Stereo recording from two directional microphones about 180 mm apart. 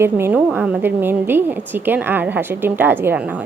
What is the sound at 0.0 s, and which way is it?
A woman's voice, 10° right (ahead or behind).